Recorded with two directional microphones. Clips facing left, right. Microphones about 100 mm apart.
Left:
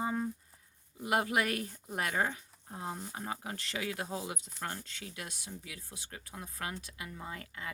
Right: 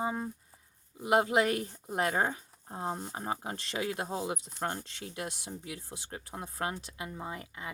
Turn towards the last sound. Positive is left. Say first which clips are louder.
# right 3 dB
turn(degrees=-20)  # may be behind; listen again after turning